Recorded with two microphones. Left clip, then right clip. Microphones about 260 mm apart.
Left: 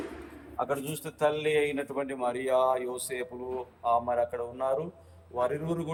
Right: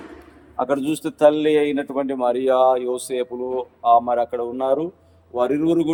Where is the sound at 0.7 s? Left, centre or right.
Right.